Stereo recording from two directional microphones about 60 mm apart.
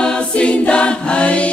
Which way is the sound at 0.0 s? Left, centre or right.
Centre.